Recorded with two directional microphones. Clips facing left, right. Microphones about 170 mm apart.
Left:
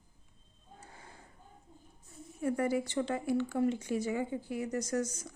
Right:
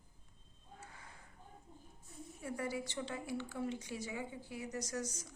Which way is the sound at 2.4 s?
55° left (ahead or behind).